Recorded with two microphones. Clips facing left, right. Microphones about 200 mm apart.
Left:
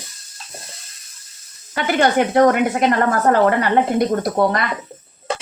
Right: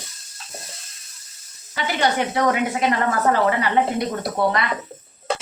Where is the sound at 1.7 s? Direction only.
55° left (ahead or behind).